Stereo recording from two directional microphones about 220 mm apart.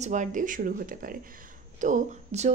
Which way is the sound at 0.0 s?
35° right (ahead or behind).